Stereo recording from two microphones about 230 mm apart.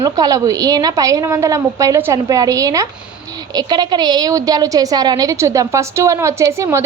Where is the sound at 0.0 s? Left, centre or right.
Centre.